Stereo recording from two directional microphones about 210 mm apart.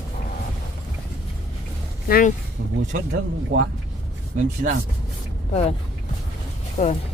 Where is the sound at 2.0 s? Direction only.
40° left (ahead or behind).